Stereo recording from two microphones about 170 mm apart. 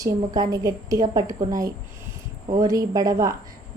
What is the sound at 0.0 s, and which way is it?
A woman's voice, 20° right (ahead or behind).